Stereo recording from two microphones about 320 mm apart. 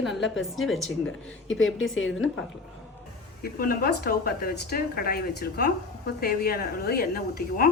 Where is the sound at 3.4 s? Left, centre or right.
Left.